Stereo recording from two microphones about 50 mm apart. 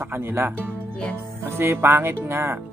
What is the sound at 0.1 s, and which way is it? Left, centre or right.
Speech, right.